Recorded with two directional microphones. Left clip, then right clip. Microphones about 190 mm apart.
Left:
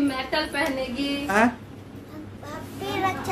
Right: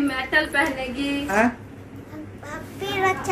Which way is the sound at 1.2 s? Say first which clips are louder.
Even; 5° left (ahead or behind).